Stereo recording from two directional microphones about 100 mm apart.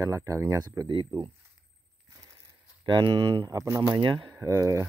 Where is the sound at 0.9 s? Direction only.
45° right (ahead or behind).